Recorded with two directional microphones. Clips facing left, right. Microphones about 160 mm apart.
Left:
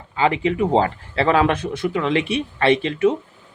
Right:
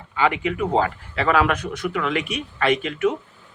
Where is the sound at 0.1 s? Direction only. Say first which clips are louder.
Left 3 dB; 30° left (ahead or behind).